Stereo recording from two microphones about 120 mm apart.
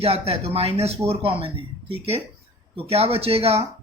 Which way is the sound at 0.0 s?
55° right (ahead or behind).